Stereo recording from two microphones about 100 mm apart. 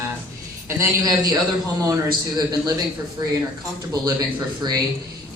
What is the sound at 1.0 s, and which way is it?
A man's voice, 40° right (ahead or behind).